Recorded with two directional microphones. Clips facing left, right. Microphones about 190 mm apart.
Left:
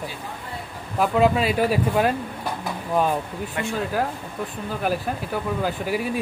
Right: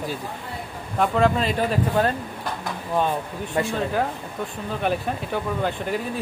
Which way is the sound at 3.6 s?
35° right (ahead or behind).